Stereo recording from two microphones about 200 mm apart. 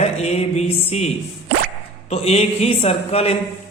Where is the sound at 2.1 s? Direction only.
30° left (ahead or behind).